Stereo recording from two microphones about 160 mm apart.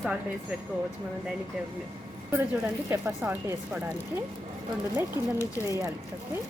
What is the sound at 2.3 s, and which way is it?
Speech, 15° right (ahead or behind).